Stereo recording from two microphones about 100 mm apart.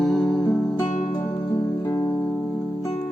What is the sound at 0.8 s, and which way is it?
Music, 40° left (ahead or behind).